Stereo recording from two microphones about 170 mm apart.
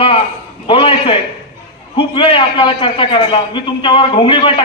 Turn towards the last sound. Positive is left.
turn(degrees=30)  # may be behind; listen again after turning